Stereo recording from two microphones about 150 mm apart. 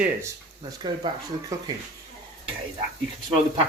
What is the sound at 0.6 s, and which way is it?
Speech, 30° right (ahead or behind).